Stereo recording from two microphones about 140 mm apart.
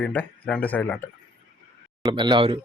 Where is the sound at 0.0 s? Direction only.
10° left (ahead or behind).